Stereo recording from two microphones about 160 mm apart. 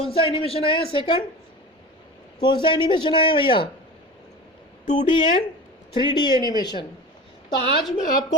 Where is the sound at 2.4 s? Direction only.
30° left (ahead or behind).